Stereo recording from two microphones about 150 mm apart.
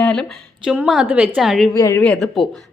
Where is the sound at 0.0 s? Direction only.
5° left (ahead or behind).